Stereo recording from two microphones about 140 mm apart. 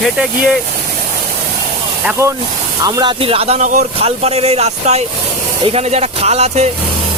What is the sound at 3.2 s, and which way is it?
Speech, 45° right (ahead or behind).